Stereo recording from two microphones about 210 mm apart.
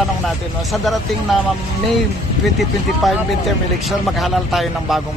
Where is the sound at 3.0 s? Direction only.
Centre (ahead or behind).